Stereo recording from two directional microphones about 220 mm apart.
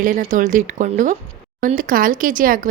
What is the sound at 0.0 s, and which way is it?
A woman's voice, 40° right (ahead or behind).